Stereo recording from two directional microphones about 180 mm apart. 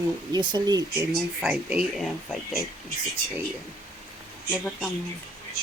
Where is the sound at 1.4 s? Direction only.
5° right (ahead or behind).